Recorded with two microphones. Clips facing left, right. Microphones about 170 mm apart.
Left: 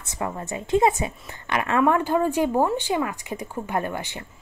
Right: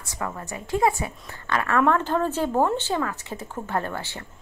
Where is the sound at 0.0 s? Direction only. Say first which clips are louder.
Left 2 dB; 20° left (ahead or behind).